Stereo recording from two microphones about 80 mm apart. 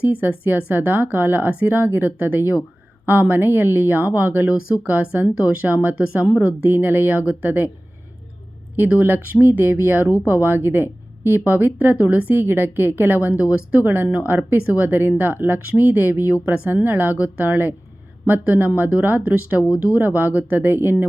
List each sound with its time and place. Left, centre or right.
0.0 s a woman's voice: right
8.7 s a woman's voice: right